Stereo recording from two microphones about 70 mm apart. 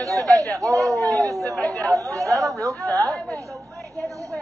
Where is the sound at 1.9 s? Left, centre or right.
Right.